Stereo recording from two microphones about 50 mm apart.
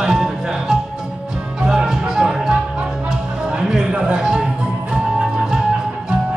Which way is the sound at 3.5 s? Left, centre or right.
Centre.